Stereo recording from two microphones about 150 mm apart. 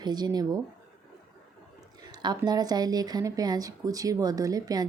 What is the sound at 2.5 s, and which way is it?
Speech, 25° right (ahead or behind).